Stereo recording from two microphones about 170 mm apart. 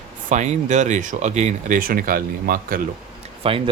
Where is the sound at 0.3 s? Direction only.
45° right (ahead or behind).